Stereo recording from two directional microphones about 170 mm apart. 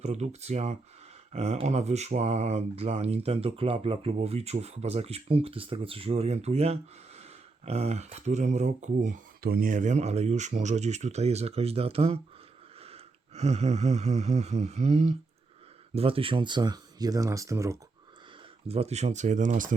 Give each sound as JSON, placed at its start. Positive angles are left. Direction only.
{"t": 0.0, "sound": "speech", "side_deg": -40}
{"t": 12.8, "sound": "a sound", "side_deg": -40}
{"t": 16.0, "sound": "speech", "side_deg": -35}
{"t": 18.7, "sound": "speech", "side_deg": -40}